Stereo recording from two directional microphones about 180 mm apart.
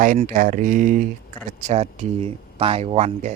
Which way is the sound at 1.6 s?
35° right (ahead or behind).